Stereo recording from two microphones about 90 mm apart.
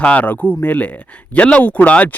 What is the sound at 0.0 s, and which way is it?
Speech, 15° left (ahead or behind).